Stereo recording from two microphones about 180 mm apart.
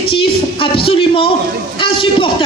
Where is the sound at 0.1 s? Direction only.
30° left (ahead or behind).